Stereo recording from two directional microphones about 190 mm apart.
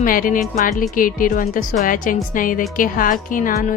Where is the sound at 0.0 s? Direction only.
45° left (ahead or behind).